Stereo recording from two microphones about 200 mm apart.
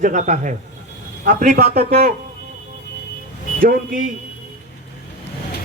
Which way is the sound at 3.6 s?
40° right (ahead or behind).